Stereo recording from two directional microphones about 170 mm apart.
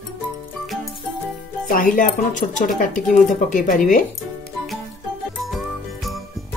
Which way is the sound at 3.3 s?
50° left (ahead or behind).